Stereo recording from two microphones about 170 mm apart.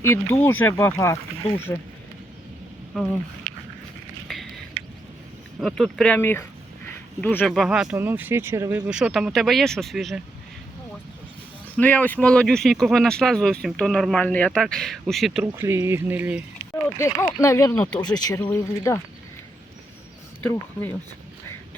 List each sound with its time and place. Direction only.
0.0 s speech: 15° left (ahead or behind)
1.5 s speech: 35° left (ahead or behind)
2.9 s speech: centre (ahead or behind)
5.5 s speech: centre (ahead or behind)
7.5 s speech: centre (ahead or behind)
8.9 s speech: 5° right (ahead or behind)
11.8 s speech: 10° left (ahead or behind)
15.6 s speech: 15° right (ahead or behind)
17.0 s speech: 15° left (ahead or behind)
20.4 s speech: 10° left (ahead or behind)